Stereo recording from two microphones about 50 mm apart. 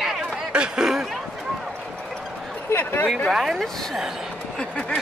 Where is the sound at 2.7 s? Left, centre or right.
Left.